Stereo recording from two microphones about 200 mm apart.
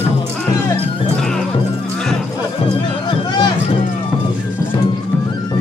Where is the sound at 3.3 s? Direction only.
20° left (ahead or behind).